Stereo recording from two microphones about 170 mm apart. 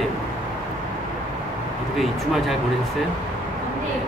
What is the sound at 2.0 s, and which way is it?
Speech, centre (ahead or behind).